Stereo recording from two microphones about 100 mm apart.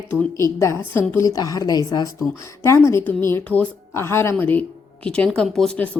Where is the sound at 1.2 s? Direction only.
40° left (ahead or behind).